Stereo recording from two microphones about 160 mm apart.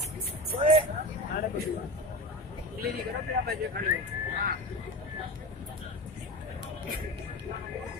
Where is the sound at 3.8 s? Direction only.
65° right (ahead or behind).